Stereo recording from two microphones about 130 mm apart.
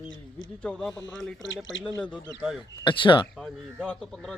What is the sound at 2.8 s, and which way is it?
Speech, 40° left (ahead or behind).